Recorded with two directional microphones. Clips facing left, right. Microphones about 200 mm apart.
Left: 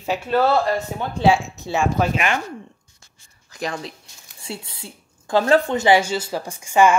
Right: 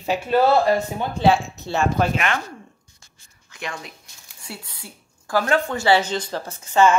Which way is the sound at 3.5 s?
35° left (ahead or behind).